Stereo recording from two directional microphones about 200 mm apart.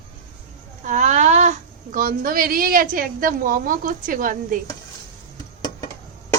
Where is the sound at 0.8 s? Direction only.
35° right (ahead or behind).